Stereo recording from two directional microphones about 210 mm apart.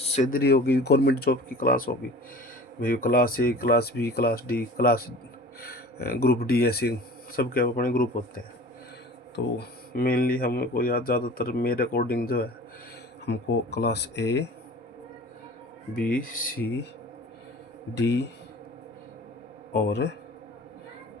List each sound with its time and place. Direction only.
0.0 s speech: 35° left (ahead or behind)
9.3 s speech: 45° left (ahead or behind)
16.0 s speech: 40° left (ahead or behind)
17.9 s speech: 55° left (ahead or behind)
19.7 s speech: 50° left (ahead or behind)